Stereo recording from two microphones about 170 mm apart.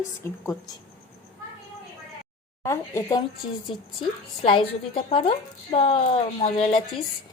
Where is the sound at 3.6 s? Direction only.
30° left (ahead or behind).